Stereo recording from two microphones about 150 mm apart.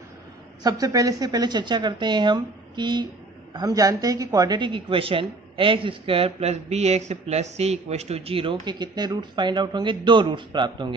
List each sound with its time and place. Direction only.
0.7 s a woman's voice: 25° right (ahead or behind)